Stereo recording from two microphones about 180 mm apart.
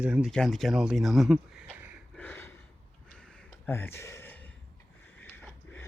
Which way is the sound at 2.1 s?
10° left (ahead or behind).